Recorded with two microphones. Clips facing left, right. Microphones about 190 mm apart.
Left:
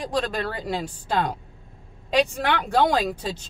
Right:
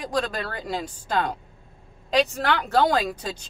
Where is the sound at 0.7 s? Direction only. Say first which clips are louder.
Left 2 dB; 5° left (ahead or behind).